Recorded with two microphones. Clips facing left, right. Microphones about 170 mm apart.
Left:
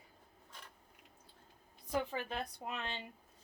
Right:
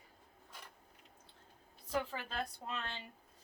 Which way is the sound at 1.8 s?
20° left (ahead or behind).